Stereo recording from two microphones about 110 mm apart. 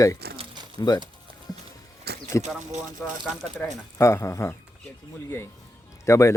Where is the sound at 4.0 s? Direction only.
25° left (ahead or behind).